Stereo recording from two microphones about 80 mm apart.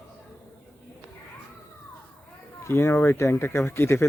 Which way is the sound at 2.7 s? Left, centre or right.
Left.